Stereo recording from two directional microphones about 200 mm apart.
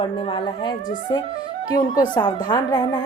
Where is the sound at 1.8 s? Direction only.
20° left (ahead or behind).